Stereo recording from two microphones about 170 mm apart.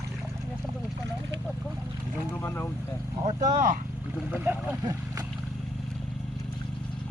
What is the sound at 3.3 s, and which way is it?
Speech, 45° right (ahead or behind).